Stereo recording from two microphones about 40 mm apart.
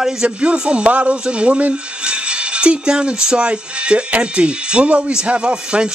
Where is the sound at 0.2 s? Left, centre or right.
Right.